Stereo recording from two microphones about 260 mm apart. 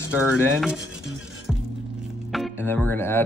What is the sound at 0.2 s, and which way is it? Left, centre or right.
Speech, centre.